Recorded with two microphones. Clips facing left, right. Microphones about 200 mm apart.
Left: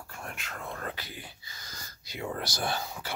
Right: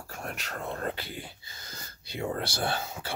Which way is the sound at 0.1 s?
40° right (ahead or behind).